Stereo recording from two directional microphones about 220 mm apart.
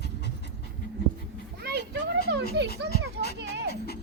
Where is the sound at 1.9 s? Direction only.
50° right (ahead or behind).